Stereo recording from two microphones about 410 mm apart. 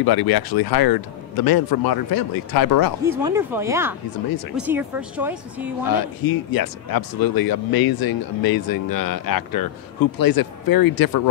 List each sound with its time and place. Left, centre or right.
0.0 s speech: left
3.1 s speech: centre
5.9 s speech: left